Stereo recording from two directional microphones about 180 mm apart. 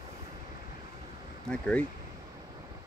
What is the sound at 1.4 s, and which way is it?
Speech, 5° left (ahead or behind).